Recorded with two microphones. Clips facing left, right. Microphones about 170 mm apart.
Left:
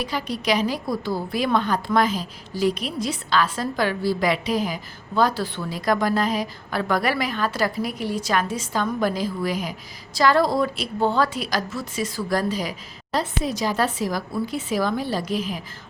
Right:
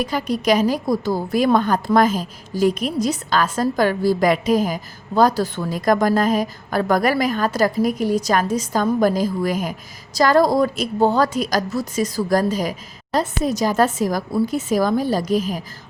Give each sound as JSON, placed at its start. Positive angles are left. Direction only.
{"t": 0.0, "sound": "a woman's voice", "side_deg": -45}